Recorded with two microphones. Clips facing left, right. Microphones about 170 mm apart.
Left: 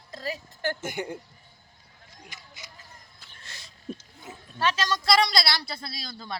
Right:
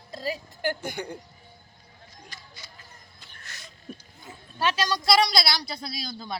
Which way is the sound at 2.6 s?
20° left (ahead or behind).